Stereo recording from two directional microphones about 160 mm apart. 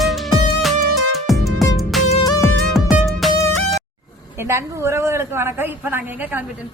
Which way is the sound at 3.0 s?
Centre (ahead or behind).